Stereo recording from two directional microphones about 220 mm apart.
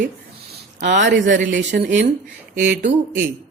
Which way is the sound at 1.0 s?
55° right (ahead or behind).